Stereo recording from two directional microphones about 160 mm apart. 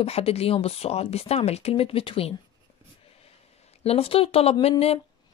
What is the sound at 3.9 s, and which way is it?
Speech, 35° left (ahead or behind).